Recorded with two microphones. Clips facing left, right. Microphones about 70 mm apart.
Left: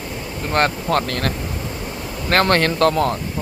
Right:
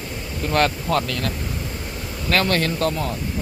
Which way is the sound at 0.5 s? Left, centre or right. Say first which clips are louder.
Left 2 dB; left.